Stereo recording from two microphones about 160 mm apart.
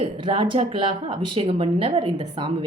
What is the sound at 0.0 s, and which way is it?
A woman's voice, 35° right (ahead or behind).